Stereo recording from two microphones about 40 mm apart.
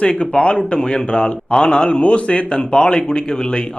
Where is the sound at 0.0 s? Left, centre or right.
Left.